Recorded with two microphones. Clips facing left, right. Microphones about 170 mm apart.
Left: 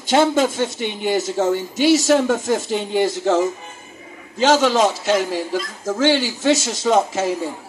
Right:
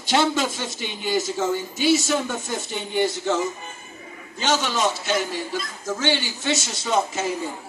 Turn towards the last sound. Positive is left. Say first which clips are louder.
# left 6 dB
turn(degrees=90)